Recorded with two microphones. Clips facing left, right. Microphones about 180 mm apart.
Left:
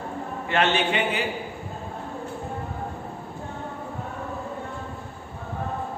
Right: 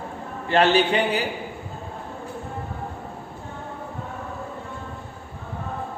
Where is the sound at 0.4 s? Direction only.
35° right (ahead or behind).